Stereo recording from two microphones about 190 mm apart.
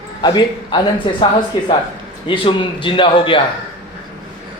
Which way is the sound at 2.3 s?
25° left (ahead or behind).